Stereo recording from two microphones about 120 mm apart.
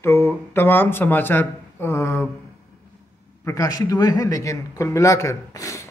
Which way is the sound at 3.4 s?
30° left (ahead or behind).